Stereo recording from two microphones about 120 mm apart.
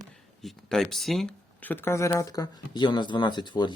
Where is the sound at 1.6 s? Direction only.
15° left (ahead or behind).